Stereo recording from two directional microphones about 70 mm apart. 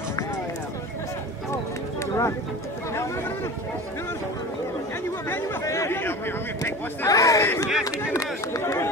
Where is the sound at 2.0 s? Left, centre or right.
Left.